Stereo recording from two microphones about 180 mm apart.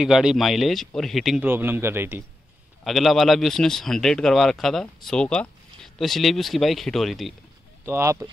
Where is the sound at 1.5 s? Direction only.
10° right (ahead or behind).